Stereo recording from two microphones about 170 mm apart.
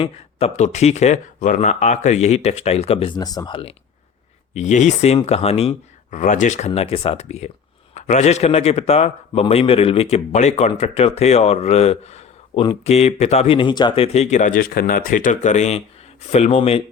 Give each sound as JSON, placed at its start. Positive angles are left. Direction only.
{"t": 0.0, "sound": "a man's voice", "side_deg": 35}
{"t": 4.5, "sound": "a man's voice", "side_deg": 45}